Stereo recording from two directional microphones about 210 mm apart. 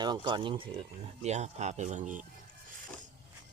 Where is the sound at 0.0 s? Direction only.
20° right (ahead or behind); by 2.2 s 35° right (ahead or behind).